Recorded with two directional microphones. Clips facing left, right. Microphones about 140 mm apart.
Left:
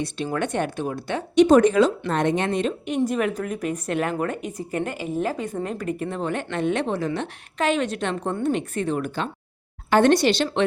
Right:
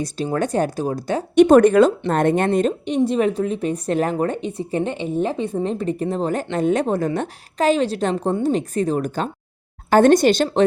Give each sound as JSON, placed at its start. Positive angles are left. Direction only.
{"t": 0.3, "sound": "speech", "side_deg": -35}
{"t": 1.4, "sound": "a woman's voice", "side_deg": -55}
{"t": 3.1, "sound": "a woman's voice", "side_deg": -30}